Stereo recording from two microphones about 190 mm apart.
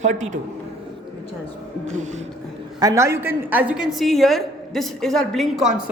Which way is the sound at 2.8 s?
15° right (ahead or behind).